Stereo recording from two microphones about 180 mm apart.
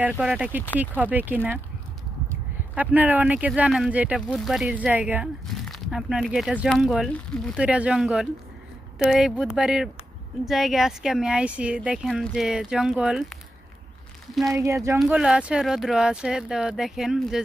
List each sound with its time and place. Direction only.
0.2 s speech: 5° right (ahead or behind)
2.7 s speech: 10° right (ahead or behind)
14.5 s speech: 15° right (ahead or behind)
15.0 s speech: 5° right (ahead or behind)